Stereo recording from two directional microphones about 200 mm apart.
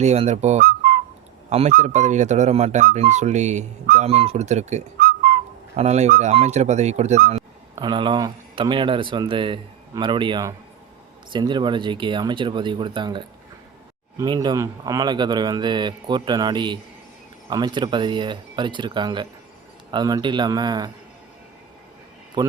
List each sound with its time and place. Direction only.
0.0 s speech: 35° right (ahead or behind)
1.5 s speech: 35° right (ahead or behind)
5.7 s speech: 35° right (ahead or behind)
22.4 s speech: 20° right (ahead or behind)